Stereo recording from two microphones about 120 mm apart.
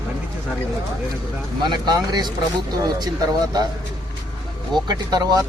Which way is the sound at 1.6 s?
35° right (ahead or behind).